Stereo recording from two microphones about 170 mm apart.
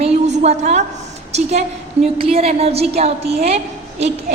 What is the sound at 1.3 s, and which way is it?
A woman's voice, 40° right (ahead or behind).